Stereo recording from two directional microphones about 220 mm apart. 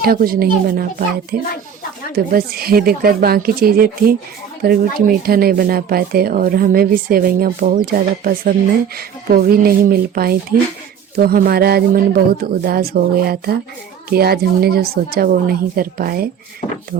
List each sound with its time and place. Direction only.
0.0 s speech: 40° right (ahead or behind)
16.6 s goat: 35° left (ahead or behind)